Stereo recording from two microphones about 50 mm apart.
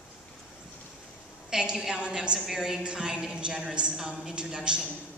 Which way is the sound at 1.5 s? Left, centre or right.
Centre.